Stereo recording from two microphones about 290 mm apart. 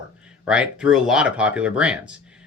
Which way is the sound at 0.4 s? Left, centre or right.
Centre.